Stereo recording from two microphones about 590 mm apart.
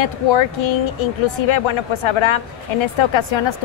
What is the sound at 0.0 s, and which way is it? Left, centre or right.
Speech, left.